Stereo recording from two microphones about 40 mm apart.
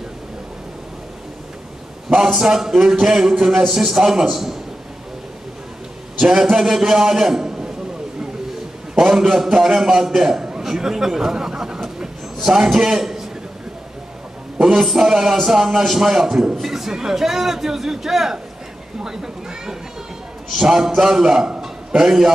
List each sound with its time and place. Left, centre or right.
2.0 s a sound: centre
2.4 s a man's voice: centre
6.2 s a man's voice: centre
9.0 s a man's voice: centre
14.7 s a man's voice: centre
21.5 s a sound: centre